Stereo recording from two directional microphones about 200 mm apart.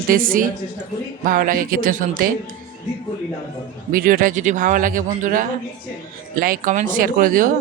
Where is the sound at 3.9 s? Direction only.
45° right (ahead or behind).